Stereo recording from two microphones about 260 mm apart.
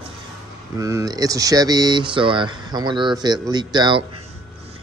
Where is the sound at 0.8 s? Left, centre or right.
Centre.